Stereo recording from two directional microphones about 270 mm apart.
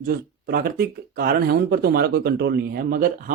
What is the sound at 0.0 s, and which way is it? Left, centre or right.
Speech, right.